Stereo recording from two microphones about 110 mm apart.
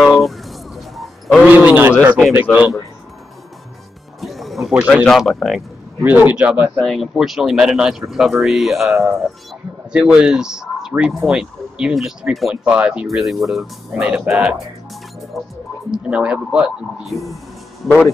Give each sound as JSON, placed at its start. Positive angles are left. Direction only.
{"t": 0.0, "sound": "a sound", "side_deg": 0}
{"t": 1.5, "sound": "a man's voice", "side_deg": -15}
{"t": 2.5, "sound": "speech", "side_deg": 10}
{"t": 4.2, "sound": "music", "side_deg": 0}
{"t": 5.0, "sound": "speech", "side_deg": 5}
{"t": 6.0, "sound": "speech", "side_deg": -15}
{"t": 6.8, "sound": "speech", "side_deg": 0}
{"t": 14.0, "sound": "speech", "side_deg": -10}
{"t": 15.3, "sound": "speech", "side_deg": 0}